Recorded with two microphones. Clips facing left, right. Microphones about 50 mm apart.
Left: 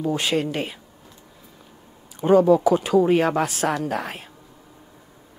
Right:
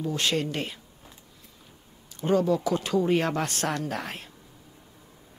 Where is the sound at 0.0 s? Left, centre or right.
Centre.